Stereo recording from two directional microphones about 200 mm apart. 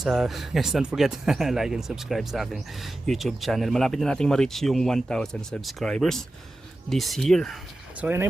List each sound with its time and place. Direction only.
0.0 s speech: centre (ahead or behind)
8.0 s speech: 10° right (ahead or behind)